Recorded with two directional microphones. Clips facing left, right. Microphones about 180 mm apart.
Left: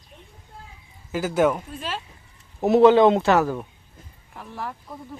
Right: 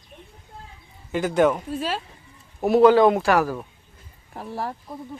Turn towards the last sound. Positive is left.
turn(degrees=-35)  # may be behind; listen again after turning